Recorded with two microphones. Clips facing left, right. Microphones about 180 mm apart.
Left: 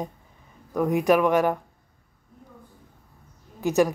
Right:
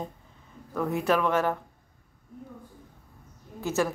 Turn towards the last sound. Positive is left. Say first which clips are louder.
# left 6 dB
turn(degrees=15)  # may be behind; listen again after turning